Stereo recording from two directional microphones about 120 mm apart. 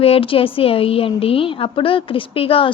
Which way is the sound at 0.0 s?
50° left (ahead or behind).